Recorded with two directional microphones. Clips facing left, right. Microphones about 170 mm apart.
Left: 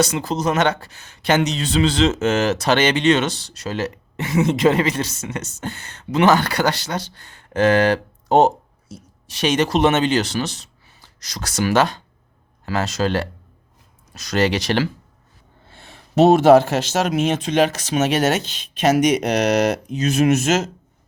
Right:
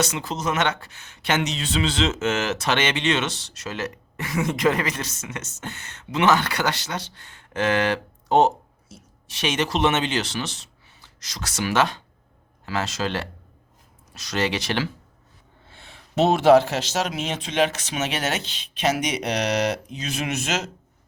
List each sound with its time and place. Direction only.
0.0 s speech: 35° left (ahead or behind)
15.7 s speech: 40° left (ahead or behind)